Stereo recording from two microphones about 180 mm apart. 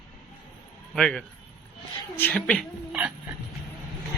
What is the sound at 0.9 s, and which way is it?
Speech, 5° left (ahead or behind).